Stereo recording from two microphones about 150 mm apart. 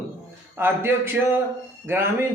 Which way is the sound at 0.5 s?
15° right (ahead or behind).